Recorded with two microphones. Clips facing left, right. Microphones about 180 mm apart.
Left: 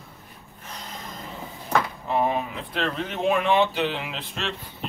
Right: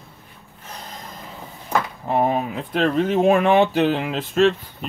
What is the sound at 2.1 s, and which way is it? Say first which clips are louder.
Speech: right 4 dB; 45° right (ahead or behind).